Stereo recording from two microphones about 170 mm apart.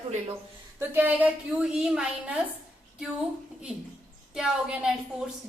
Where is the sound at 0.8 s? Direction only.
10° right (ahead or behind).